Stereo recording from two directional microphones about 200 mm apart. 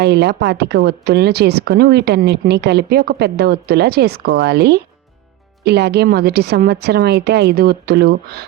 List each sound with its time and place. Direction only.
0.0 s a woman's voice: 55° right (ahead or behind)